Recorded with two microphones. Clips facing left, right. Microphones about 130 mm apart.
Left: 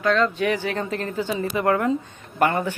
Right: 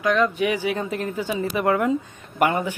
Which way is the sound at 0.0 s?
10° right (ahead or behind).